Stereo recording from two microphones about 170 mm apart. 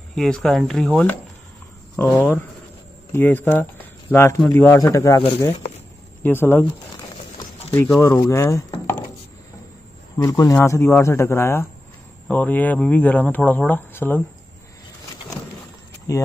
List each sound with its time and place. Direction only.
0.1 s speech: centre (ahead or behind); by 5.2 s 20° left (ahead or behind)
6.2 s speech: 15° left (ahead or behind)
7.7 s speech: 10° left (ahead or behind)
10.1 s speech: 20° left (ahead or behind)
16.1 s speech: 20° left (ahead or behind)